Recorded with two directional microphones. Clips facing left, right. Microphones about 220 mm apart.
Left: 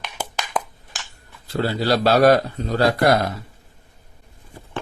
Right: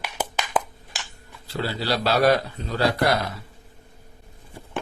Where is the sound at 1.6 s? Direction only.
45° left (ahead or behind).